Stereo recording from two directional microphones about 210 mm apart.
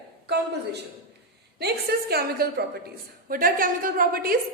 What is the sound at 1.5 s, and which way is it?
A woman's voice, 50° right (ahead or behind).